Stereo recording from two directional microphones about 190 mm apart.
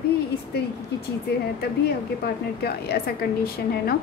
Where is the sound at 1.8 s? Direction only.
55° left (ahead or behind).